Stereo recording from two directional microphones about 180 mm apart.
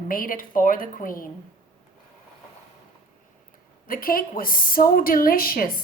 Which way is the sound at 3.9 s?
50° left (ahead or behind).